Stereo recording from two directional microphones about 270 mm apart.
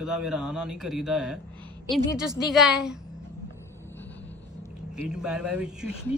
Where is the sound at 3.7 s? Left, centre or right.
Centre.